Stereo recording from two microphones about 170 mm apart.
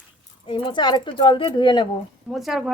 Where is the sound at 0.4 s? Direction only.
30° left (ahead or behind).